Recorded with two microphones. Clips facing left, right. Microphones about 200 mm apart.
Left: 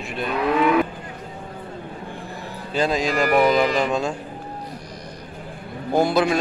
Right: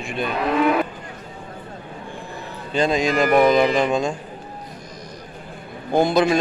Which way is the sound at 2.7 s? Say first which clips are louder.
Right 2 dB; centre (ahead or behind).